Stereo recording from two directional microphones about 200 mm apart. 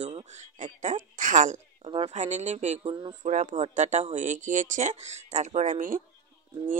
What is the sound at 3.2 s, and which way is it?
A woman's voice, 35° right (ahead or behind).